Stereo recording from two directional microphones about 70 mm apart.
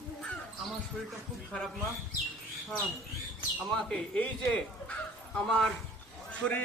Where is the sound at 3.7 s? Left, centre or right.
Centre.